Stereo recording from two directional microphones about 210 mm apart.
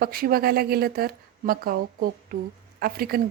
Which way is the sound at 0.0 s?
45° right (ahead or behind).